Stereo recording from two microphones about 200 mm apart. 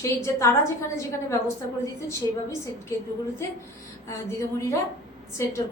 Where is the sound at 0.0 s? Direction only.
15° left (ahead or behind).